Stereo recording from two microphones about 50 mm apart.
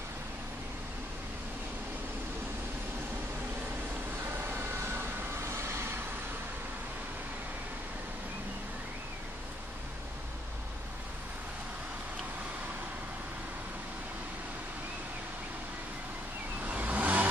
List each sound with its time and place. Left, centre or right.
4.2 s vehicle: right
16.6 s vehicle: right